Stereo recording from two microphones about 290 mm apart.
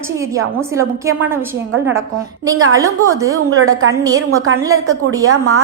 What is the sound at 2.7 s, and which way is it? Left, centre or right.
Speech, centre.